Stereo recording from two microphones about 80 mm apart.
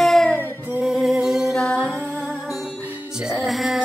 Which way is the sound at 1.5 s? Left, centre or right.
Centre.